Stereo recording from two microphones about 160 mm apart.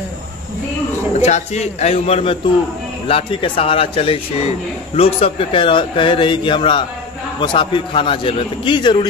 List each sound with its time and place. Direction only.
1.2 s a man's voice: 45° left (ahead or behind)